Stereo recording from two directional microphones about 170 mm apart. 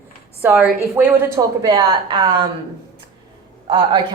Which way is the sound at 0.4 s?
10° right (ahead or behind).